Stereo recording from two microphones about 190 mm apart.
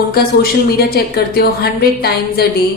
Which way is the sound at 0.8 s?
55° left (ahead or behind).